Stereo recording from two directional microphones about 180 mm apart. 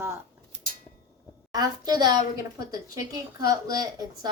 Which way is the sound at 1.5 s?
20° right (ahead or behind).